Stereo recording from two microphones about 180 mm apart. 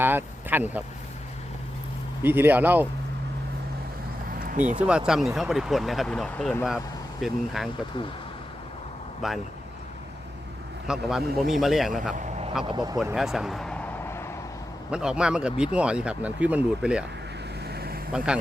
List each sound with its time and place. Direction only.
0.0 s speech: 10° right (ahead or behind)
2.2 s speech: 10° right (ahead or behind)
4.4 s vehicle: 45° right (ahead or behind)
4.8 s speech: 5° right (ahead or behind)
7.2 s speech: centre (ahead or behind)
9.2 s speech: centre (ahead or behind)
10.8 s speech: 5° right (ahead or behind)
12.6 s speech: 20° right (ahead or behind)
13.1 s speech: centre (ahead or behind)
14.8 s speech: 5° right (ahead or behind)
17.7 s vehicle: 60° right (ahead or behind)